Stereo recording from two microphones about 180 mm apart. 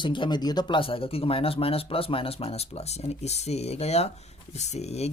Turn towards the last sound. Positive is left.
turn(degrees=35)  # may be behind; listen again after turning